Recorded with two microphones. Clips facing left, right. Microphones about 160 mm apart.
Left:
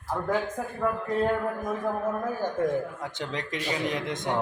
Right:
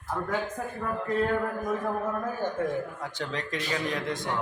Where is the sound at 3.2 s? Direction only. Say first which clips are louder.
Right 1 dB; 20° left (ahead or behind).